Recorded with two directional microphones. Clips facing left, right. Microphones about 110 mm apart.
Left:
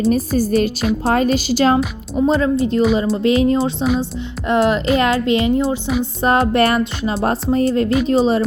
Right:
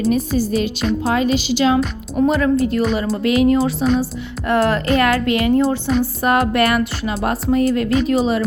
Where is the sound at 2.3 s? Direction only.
25° left (ahead or behind).